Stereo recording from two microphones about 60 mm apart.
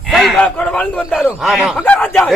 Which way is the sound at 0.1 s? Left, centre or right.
Centre.